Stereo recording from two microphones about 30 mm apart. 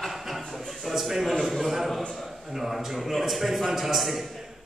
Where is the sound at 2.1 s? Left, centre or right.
Centre.